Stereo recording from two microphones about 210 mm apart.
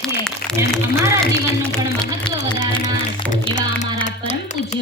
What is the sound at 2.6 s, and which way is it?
Music, 35° left (ahead or behind).